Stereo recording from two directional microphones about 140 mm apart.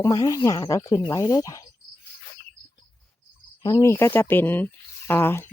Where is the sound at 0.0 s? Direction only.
25° left (ahead or behind).